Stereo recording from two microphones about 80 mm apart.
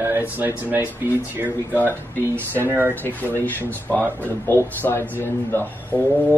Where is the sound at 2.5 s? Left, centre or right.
Right.